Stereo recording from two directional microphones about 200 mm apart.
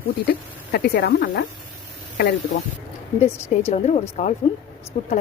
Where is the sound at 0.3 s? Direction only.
50° left (ahead or behind).